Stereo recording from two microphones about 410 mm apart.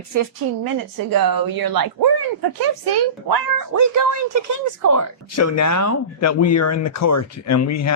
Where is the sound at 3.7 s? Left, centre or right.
Right.